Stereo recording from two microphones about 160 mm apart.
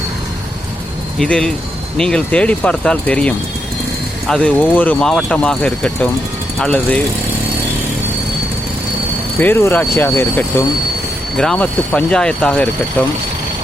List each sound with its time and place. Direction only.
1.2 s speech: 5° left (ahead or behind)
9.4 s speech: 15° left (ahead or behind)